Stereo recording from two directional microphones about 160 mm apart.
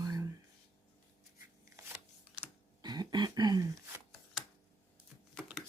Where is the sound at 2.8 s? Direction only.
25° right (ahead or behind).